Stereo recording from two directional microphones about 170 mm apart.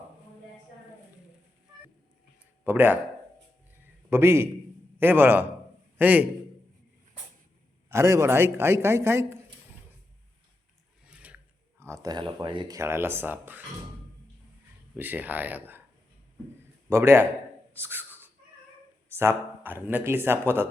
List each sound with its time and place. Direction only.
2.6 s speech: 10° right (ahead or behind)
4.1 s a man's voice: 15° right (ahead or behind)
7.9 s speech: 15° right (ahead or behind)
11.0 s a sound: 5° right (ahead or behind)
11.8 s speech: 20° right (ahead or behind)
14.9 s speech: 10° right (ahead or behind)
16.9 s speech: 15° right (ahead or behind)
17.7 s a sound: 10° right (ahead or behind)
19.1 s speech: 15° right (ahead or behind)